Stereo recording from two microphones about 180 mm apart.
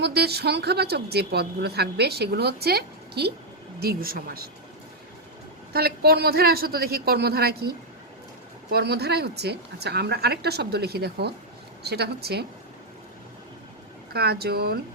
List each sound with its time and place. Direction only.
0.0 s speech: 65° right (ahead or behind)
5.7 s speech: 60° right (ahead or behind)
14.1 s speech: 60° right (ahead or behind)